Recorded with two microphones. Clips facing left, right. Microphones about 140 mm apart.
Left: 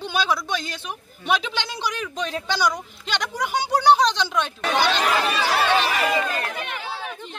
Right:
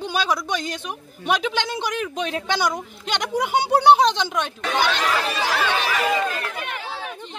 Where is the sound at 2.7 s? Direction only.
25° right (ahead or behind).